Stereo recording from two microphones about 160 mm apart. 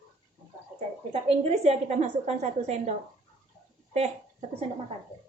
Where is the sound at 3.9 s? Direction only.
40° right (ahead or behind).